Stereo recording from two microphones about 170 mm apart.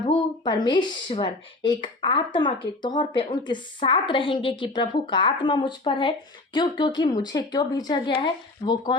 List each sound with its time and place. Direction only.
0.1 s speech: 25° left (ahead or behind)